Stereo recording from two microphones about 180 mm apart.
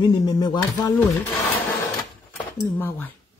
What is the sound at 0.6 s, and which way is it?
Speech, 10° left (ahead or behind).